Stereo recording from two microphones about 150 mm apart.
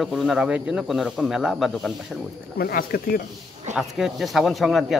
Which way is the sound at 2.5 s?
85° left.